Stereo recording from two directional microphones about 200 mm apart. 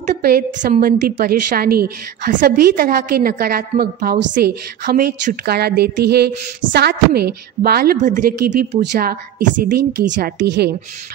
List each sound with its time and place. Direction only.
0.1 s a woman's voice: 50° right (ahead or behind)